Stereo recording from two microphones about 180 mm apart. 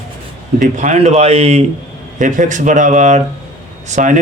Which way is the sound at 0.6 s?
40° right (ahead or behind).